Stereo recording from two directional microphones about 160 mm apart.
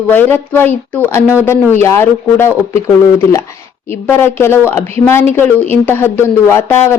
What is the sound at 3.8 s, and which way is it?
A woman's voice, 15° left (ahead or behind).